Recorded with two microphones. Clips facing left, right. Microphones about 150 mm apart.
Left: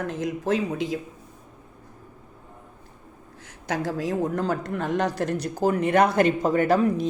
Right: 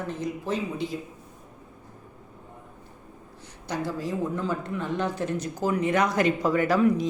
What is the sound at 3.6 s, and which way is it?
Speech, 90° left.